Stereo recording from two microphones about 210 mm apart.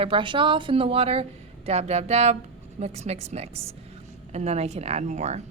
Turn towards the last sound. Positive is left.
turn(degrees=-35)  # may be behind; listen again after turning